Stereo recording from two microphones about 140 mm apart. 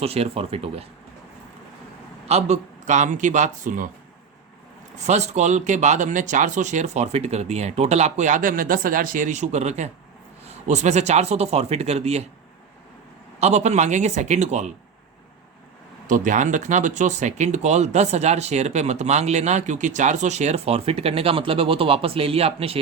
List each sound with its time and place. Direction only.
0.0 s speech: 45° right (ahead or behind)
2.2 s speech: 50° right (ahead or behind); by 3.8 s 65° right (ahead or behind)
4.9 s speech: 55° right (ahead or behind)
13.4 s speech: 55° right (ahead or behind)
16.0 s speech: 70° right (ahead or behind); by 22.8 s 45° right (ahead or behind)